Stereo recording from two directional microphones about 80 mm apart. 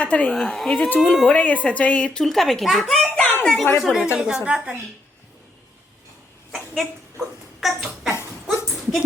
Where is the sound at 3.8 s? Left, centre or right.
Centre.